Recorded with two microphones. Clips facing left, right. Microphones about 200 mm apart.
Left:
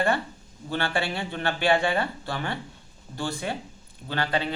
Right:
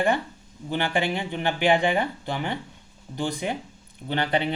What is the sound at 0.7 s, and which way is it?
Speech, 15° right (ahead or behind).